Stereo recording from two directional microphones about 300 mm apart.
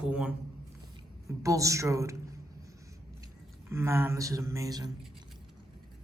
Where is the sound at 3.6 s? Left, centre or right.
Centre.